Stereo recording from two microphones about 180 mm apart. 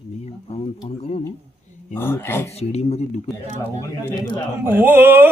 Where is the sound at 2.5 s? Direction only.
35° left (ahead or behind).